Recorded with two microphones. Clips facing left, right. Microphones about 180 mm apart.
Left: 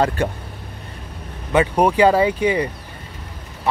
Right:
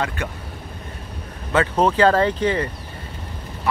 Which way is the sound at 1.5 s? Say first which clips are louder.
Left 2 dB; 15° left (ahead or behind).